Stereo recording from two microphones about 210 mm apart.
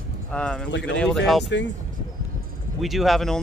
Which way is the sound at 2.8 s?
Centre (ahead or behind).